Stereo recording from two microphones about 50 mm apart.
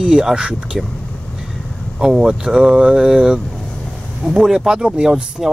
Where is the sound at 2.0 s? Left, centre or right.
Centre.